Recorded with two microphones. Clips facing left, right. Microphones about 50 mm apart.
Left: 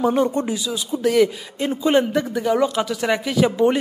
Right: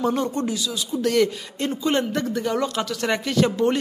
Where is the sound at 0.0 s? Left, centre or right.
Centre.